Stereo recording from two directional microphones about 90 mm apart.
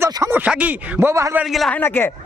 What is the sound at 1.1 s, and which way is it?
Speech, 35° right (ahead or behind).